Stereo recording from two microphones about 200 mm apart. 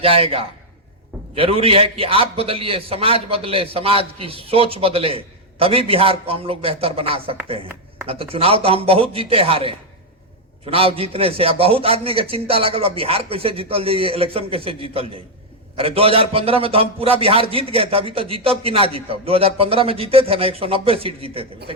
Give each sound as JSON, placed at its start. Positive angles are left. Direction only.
{"t": 0.0, "sound": "a man's voice", "side_deg": -30}